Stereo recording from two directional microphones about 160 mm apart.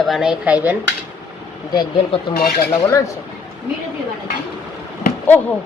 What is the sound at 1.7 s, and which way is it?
Speech, 30° left (ahead or behind).